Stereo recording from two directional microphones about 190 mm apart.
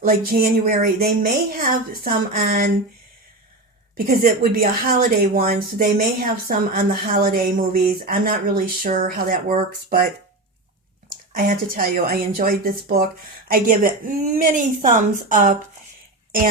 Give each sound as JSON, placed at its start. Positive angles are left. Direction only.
{"t": 0.0, "sound": "a woman's voice", "side_deg": -50}
{"t": 3.9, "sound": "a woman's voice", "side_deg": -50}
{"t": 11.3, "sound": "a woman's voice", "side_deg": -50}